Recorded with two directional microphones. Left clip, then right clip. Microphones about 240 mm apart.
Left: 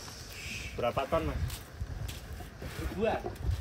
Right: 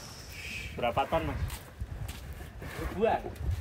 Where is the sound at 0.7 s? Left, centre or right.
Right.